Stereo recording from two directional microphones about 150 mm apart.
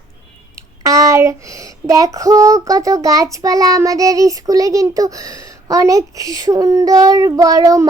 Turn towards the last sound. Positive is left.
turn(degrees=-25)  # may be behind; listen again after turning